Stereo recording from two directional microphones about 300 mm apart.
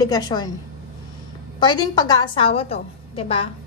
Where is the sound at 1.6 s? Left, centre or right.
Centre.